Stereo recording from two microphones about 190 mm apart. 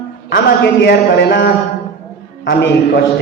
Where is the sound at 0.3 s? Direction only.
60° left (ahead or behind).